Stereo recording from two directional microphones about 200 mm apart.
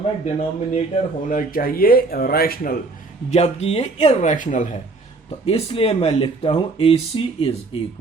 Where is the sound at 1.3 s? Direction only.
45° left (ahead or behind).